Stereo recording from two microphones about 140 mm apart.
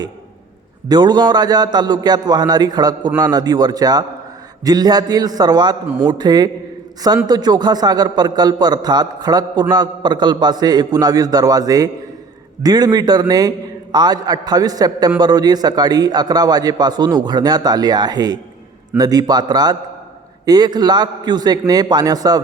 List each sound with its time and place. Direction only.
0.9 s a man's voice: 30° right (ahead or behind)